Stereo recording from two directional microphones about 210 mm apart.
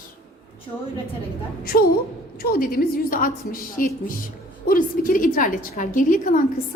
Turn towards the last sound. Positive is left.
turn(degrees=40)  # may be behind; listen again after turning